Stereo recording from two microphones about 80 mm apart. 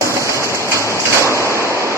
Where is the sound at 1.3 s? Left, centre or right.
Left.